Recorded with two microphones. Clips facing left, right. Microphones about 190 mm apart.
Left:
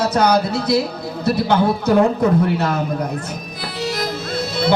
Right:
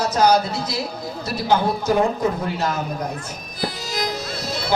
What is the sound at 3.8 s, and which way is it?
Music, 60° left (ahead or behind).